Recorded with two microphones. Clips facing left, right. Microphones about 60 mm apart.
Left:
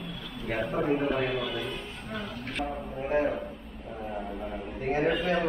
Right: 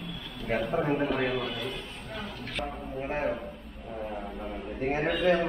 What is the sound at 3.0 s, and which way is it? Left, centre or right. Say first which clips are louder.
Speech: left 5 dB; centre.